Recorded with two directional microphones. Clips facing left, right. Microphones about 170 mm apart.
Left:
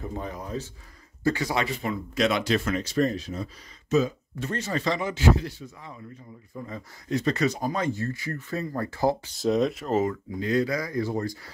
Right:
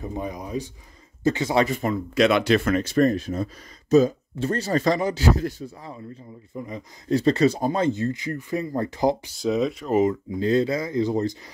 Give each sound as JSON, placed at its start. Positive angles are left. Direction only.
{"t": 0.0, "sound": "speech", "side_deg": -15}
{"t": 1.5, "sound": "speech", "side_deg": -45}
{"t": 2.1, "sound": "speech", "side_deg": -65}
{"t": 3.9, "sound": "speech", "side_deg": -40}
{"t": 6.5, "sound": "speech", "side_deg": -20}
{"t": 7.1, "sound": "speech", "side_deg": -30}
{"t": 9.4, "sound": "speech", "side_deg": 0}
{"t": 9.8, "sound": "speech", "side_deg": -15}